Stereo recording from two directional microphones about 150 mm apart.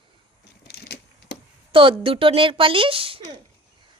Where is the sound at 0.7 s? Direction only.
90° left.